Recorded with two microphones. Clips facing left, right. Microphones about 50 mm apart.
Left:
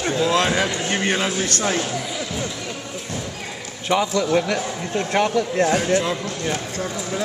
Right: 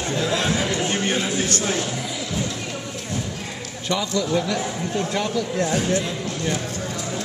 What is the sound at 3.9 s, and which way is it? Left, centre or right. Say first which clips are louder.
Speech: left 4 dB; left.